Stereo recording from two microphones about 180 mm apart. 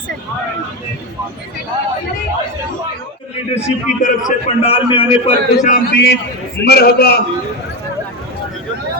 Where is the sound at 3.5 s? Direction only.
40° left (ahead or behind).